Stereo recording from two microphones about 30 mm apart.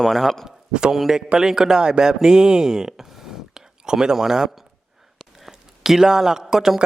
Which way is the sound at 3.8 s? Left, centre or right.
Right.